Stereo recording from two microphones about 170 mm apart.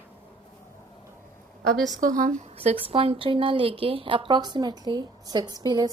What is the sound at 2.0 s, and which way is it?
Speech, 50° right (ahead or behind).